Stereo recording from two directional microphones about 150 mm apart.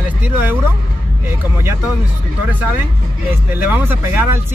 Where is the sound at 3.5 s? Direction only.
15° right (ahead or behind).